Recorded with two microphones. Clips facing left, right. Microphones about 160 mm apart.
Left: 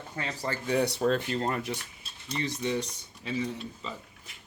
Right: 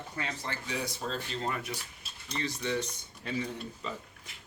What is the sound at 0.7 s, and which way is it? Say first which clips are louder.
Speech: left 12 dB; 65° left (ahead or behind).